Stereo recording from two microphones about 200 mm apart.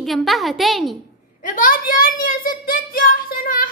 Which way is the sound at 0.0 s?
Centre (ahead or behind).